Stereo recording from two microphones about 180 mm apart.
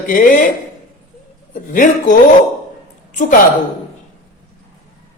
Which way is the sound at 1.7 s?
45° left (ahead or behind).